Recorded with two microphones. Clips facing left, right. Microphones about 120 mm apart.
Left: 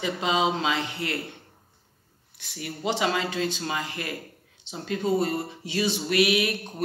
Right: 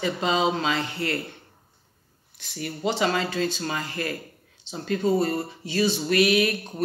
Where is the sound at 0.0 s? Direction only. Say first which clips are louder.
Right 1 dB; 15° left (ahead or behind).